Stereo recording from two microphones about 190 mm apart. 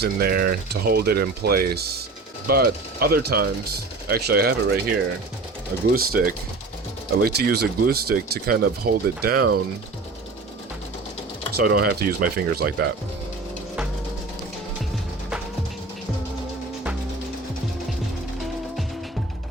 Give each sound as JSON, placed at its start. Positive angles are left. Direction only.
{"t": 0.0, "sound": "speech", "side_deg": -50}
{"t": 5.9, "sound": "speech", "side_deg": -50}
{"t": 11.5, "sound": "speech", "side_deg": -55}